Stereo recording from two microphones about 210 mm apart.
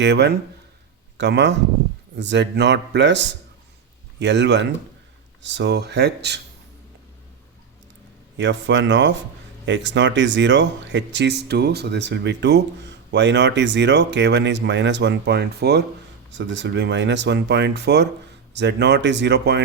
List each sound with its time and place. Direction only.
0.0 s speech: 55° right (ahead or behind)
8.4 s speech: 60° right (ahead or behind)